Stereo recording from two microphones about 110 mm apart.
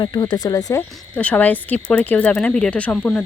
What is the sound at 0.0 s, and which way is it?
Speech, 40° left (ahead or behind).